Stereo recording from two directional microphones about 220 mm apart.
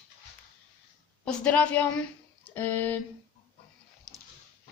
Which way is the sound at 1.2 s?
5° left (ahead or behind).